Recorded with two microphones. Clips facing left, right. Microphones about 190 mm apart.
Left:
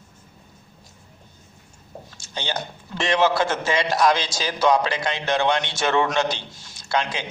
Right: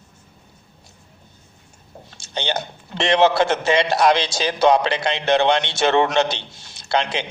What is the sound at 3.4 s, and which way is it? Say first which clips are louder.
A man's voice: right 4 dB; 65° right (ahead or behind).